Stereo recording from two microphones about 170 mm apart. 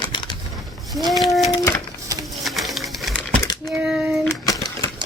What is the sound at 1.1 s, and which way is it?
Speech, centre (ahead or behind).